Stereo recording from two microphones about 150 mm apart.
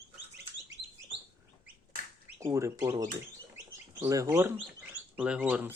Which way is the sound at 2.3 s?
20° right (ahead or behind).